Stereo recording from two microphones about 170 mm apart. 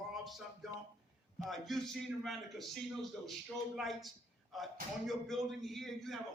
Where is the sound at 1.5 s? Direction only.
Centre (ahead or behind).